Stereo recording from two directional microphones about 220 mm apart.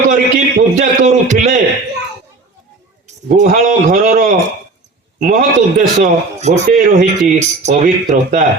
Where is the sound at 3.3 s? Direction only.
35° right (ahead or behind).